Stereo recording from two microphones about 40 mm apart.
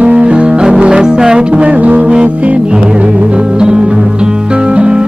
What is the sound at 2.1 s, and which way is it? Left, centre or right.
Music, right.